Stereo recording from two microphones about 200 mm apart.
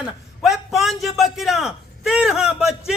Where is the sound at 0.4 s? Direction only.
Centre (ahead or behind).